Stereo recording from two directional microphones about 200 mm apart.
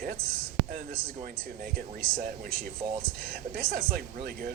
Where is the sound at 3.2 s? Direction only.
45° right (ahead or behind).